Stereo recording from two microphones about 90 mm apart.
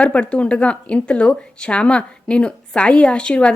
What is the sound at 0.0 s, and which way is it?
A woman's voice, 15° left (ahead or behind).